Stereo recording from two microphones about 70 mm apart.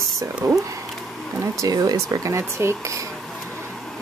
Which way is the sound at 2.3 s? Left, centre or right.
Right.